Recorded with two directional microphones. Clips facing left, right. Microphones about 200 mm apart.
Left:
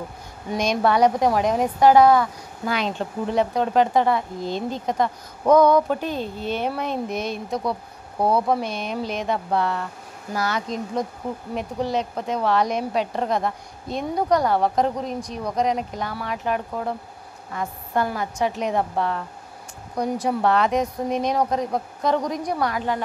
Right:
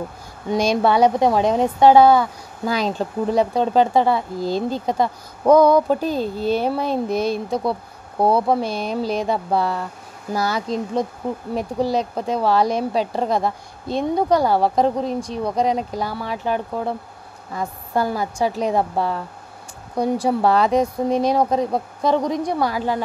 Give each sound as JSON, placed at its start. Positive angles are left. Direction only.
{"t": 0.5, "sound": "a woman's voice", "side_deg": -30}